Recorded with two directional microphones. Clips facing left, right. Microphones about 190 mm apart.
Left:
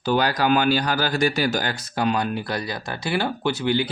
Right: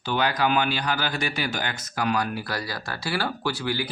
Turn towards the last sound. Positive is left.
turn(degrees=20)  # may be behind; listen again after turning